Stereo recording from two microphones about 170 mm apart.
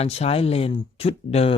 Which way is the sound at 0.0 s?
35° left (ahead or behind).